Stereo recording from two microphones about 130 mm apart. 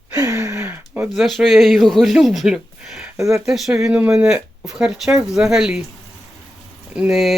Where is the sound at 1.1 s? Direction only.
Centre (ahead or behind).